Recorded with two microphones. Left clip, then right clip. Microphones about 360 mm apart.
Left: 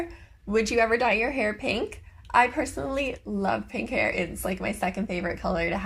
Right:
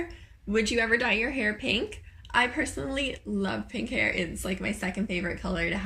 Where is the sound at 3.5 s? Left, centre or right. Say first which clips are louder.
Left 4 dB; left.